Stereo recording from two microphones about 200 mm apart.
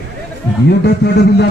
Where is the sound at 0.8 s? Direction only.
55° left (ahead or behind).